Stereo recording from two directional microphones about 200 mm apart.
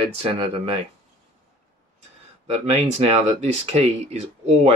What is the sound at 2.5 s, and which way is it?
Speech, 30° right (ahead or behind).